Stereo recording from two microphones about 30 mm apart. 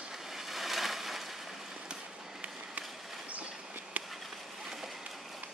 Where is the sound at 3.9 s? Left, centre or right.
Right.